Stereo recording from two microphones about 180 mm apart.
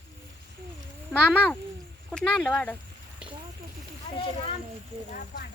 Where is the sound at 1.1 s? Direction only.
5° right (ahead or behind).